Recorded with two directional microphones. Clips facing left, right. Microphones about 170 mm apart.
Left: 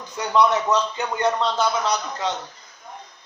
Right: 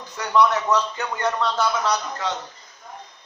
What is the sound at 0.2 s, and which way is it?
A man's voice, 20° left (ahead or behind).